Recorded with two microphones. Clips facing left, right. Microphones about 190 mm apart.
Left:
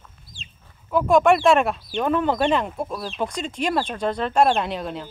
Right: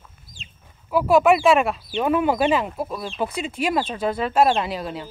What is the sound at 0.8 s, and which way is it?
Speech, 5° right (ahead or behind).